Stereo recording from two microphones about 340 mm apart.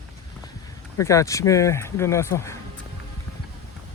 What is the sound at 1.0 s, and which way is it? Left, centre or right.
Speech, centre.